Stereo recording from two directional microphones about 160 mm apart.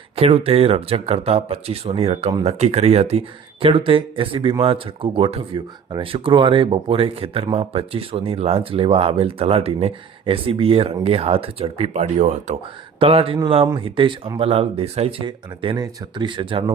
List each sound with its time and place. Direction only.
0.2 s speech: 35° right (ahead or behind)